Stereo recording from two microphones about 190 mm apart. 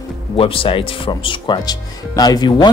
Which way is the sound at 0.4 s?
30° left (ahead or behind).